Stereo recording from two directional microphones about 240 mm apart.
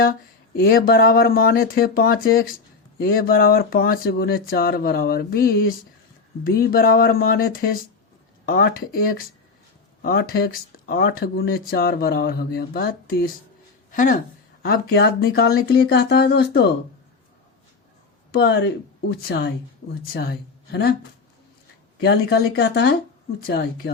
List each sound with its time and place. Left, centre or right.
0.0 s speech: left
18.3 s speech: left
22.0 s speech: left